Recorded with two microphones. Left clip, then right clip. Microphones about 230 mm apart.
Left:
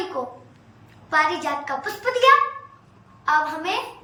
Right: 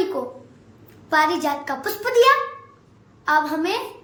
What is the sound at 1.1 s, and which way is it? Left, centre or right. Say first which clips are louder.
A child's voice: right 2 dB; right.